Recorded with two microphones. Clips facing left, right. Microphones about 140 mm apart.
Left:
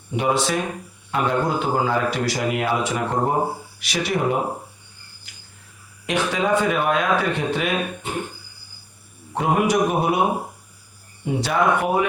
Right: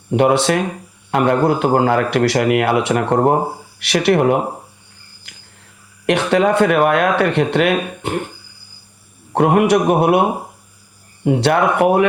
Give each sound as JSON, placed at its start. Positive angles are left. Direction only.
{"t": 0.1, "sound": "a man's voice", "side_deg": -65}
{"t": 5.2, "sound": "a sound", "side_deg": -65}
{"t": 6.1, "sound": "speech", "side_deg": -65}
{"t": 9.3, "sound": "speech", "side_deg": -65}
{"t": 11.3, "sound": "speech", "side_deg": -70}